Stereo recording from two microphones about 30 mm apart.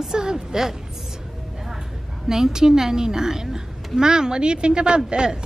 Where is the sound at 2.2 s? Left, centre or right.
Centre.